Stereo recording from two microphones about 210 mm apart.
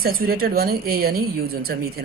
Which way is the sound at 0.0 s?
45° right (ahead or behind).